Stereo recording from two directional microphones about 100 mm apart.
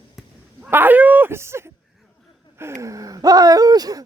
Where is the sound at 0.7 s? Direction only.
20° right (ahead or behind).